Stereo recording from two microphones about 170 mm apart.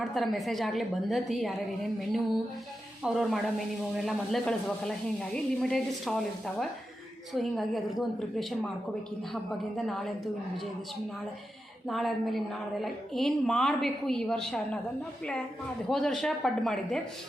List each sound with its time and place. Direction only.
0.0 s a woman's voice: centre (ahead or behind)
11.9 s a woman's voice: centre (ahead or behind)
15.9 s a woman's voice: centre (ahead or behind)